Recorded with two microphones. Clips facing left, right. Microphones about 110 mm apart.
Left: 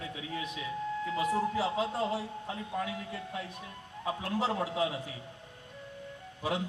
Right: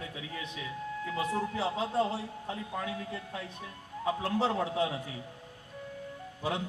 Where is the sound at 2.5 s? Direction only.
30° right (ahead or behind).